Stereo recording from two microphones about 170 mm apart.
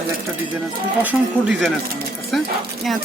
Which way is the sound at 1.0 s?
5° right (ahead or behind).